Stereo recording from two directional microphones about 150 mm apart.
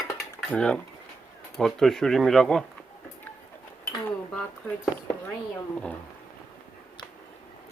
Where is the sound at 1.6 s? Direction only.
5° left (ahead or behind).